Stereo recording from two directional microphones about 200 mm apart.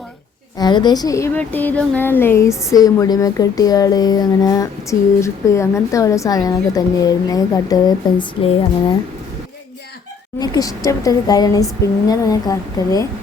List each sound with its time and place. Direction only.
0.6 s a woman's voice: 20° left (ahead or behind)
10.4 s a woman's voice: 20° left (ahead or behind)